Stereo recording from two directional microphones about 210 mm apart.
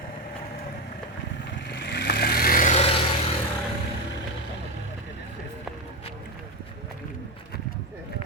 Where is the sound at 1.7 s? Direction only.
50° left (ahead or behind); by 2.9 s 35° left (ahead or behind).